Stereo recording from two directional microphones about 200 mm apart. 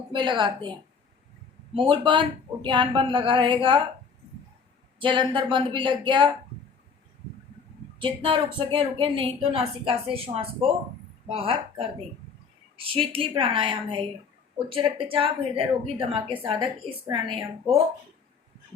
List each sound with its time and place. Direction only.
0.1 s a woman's voice: 25° right (ahead or behind)
4.9 s a woman's voice: 25° right (ahead or behind)
7.9 s a woman's voice: 25° right (ahead or behind)
12.7 s a woman's voice: 25° right (ahead or behind)